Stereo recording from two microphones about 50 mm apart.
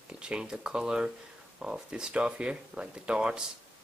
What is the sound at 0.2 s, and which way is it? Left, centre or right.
Speech, centre.